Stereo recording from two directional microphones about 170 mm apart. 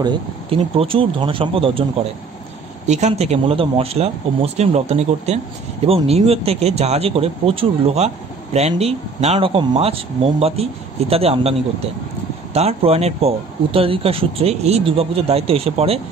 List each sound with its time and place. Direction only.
0.0 s speech: 30° right (ahead or behind)
2.9 s speech: 40° right (ahead or behind)